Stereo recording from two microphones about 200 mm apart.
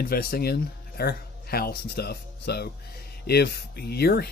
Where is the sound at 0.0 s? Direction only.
50° left (ahead or behind).